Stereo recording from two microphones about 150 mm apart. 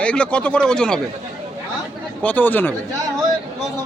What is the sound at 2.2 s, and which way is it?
Speech, 10° left (ahead or behind).